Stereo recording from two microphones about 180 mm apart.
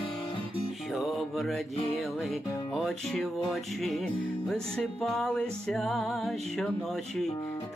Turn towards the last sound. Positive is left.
turn(degrees=0)  # may be behind; listen again after turning